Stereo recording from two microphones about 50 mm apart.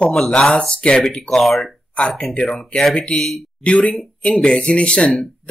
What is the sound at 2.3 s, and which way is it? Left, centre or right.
Speech, centre.